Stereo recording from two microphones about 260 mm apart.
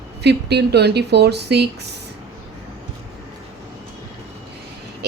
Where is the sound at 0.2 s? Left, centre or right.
Right.